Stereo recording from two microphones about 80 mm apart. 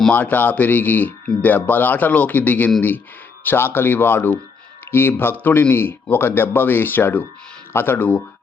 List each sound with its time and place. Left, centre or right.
0.1 s speech: left